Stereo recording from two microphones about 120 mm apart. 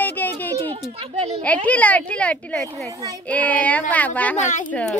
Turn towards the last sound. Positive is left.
turn(degrees=90)